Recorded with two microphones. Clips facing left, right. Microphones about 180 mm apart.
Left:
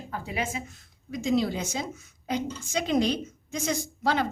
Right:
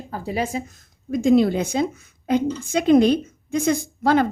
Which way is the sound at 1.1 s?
55° right (ahead or behind).